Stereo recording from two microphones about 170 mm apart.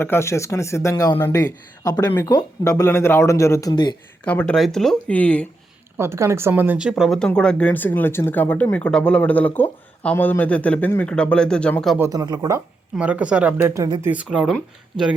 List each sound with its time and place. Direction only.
0.0 s speech: 15° left (ahead or behind)
4.3 s speech: 10° left (ahead or behind)
6.0 s speech: 15° right (ahead or behind); by 11.9 s 5° left (ahead or behind)
11.9 s speech: 20° right (ahead or behind)
13.0 s a woman's voice: 10° right (ahead or behind)
14.1 s speech: 5° right (ahead or behind)